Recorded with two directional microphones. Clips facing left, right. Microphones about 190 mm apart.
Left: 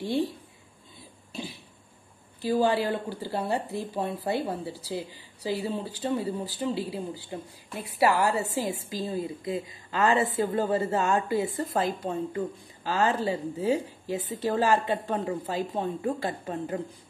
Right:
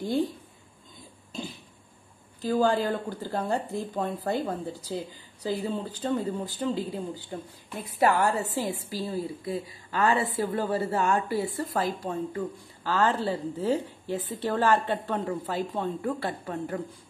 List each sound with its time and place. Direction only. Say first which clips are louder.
1.3 s cough: right 1 dB; 10° left (ahead or behind)
2.4 s a woman's voice: even; 10° left (ahead or behind)